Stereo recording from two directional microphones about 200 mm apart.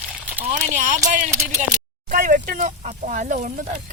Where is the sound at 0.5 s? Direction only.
40° right (ahead or behind).